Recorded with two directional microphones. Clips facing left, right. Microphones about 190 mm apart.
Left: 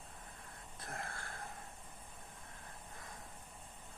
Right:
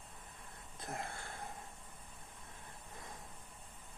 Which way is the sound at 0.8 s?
20° right (ahead or behind).